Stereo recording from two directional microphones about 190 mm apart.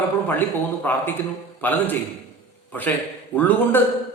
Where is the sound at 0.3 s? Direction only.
10° left (ahead or behind).